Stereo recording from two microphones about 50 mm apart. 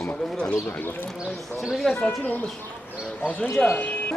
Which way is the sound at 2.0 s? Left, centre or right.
Left.